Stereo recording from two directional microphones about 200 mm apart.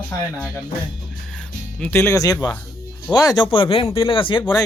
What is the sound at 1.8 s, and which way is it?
Speech, 10° left (ahead or behind).